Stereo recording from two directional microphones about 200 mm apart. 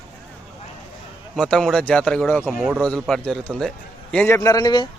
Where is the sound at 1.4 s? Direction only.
Centre (ahead or behind).